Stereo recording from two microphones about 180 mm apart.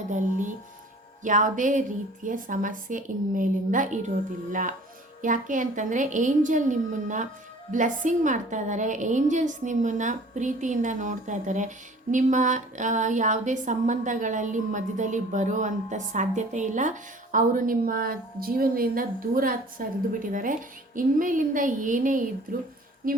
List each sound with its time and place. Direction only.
0.1 s a woman's voice: 45° right (ahead or behind)
5.2 s a woman's voice: 45° right (ahead or behind)